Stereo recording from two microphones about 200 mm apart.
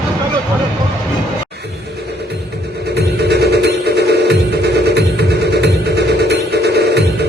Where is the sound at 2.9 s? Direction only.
55° right (ahead or behind).